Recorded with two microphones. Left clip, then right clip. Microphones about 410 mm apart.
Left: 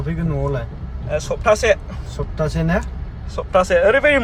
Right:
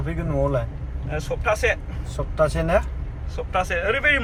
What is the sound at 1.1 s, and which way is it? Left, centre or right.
Speech, centre.